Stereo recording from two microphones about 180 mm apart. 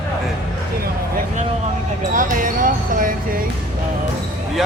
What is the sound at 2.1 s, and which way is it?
Basketball bounce, 45° right (ahead or behind).